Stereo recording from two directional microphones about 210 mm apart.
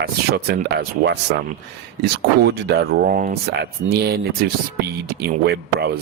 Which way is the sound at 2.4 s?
55° right (ahead or behind).